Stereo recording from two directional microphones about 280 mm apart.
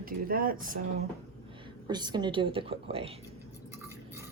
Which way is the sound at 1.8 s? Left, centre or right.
Centre.